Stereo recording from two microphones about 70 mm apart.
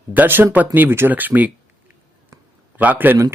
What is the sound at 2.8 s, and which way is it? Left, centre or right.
Speech, right.